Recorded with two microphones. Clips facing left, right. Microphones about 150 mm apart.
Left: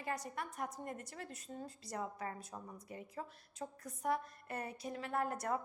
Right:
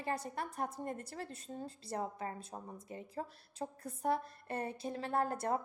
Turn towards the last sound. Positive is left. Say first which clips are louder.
# right 3 dB
turn(degrees=-30)  # may be behind; listen again after turning